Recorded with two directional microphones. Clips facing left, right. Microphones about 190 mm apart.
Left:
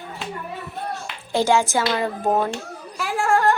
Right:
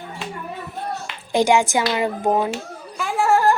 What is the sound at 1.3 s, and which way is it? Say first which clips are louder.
A woman's voice: right 2 dB; 15° right (ahead or behind).